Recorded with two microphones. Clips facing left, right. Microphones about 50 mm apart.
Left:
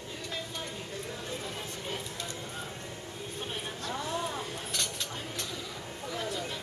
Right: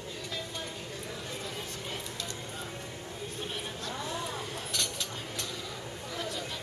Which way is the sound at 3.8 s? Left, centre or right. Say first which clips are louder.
Left 4 dB; centre.